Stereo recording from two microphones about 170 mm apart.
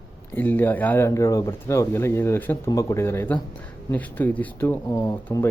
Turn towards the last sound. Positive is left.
turn(degrees=20)  # may be behind; listen again after turning